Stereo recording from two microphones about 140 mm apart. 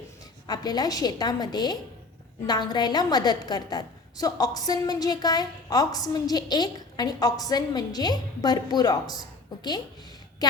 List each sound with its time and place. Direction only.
0.4 s a woman's voice: 30° left (ahead or behind)